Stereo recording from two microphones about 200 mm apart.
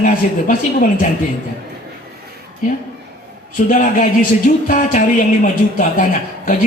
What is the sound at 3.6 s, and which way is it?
A woman's voice, 40° left (ahead or behind).